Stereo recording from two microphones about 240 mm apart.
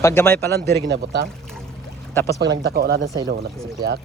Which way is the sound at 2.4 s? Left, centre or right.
Right.